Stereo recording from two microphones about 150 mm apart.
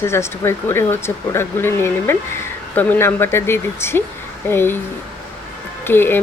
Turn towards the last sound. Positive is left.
turn(degrees=15)  # may be behind; listen again after turning